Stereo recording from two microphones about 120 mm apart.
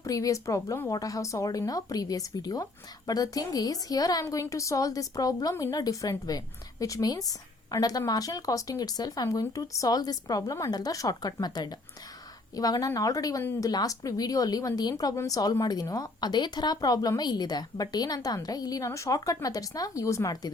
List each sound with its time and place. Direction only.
0.0 s a woman's voice: 30° left (ahead or behind)